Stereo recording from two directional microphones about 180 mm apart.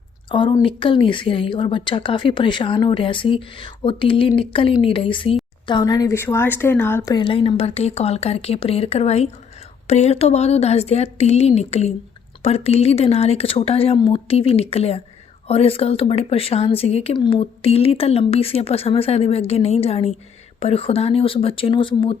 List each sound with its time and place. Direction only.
0.3 s a woman's voice: 25° left (ahead or behind)